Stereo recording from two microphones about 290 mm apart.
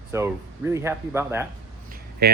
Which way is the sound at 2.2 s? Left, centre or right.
Right.